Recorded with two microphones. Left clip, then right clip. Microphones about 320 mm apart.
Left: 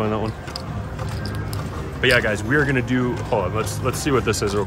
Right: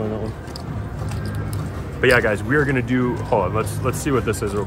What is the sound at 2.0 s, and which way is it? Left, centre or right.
Speech, centre.